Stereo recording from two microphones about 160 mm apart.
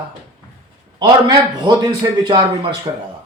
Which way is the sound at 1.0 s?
30° right (ahead or behind).